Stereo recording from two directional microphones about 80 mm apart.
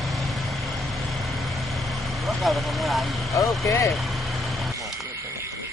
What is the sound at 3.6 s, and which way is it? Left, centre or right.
Speech, left.